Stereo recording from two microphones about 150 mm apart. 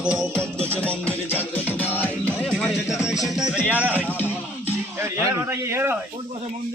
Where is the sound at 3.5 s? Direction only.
10° right (ahead or behind).